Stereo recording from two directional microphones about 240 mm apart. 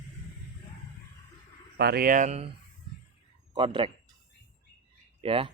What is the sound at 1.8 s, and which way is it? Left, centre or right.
Speech, right.